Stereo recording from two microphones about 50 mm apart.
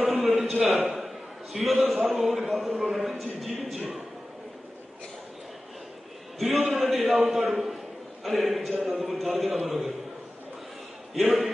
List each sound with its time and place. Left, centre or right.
0.0 s a sound: centre
2.5 s a man's voice: centre
6.4 s a man's voice: centre
11.1 s a man's voice: centre